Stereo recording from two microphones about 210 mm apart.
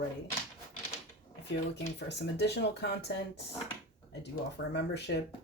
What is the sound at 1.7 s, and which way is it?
Speech, 55° left (ahead or behind).